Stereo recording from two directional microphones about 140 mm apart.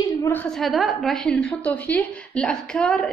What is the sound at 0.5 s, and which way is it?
A woman's voice, centre (ahead or behind).